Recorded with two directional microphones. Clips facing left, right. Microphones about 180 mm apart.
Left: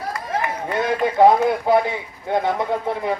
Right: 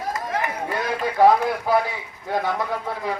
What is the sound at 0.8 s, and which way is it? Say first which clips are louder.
Speech: left 3 dB; 25° left (ahead or behind).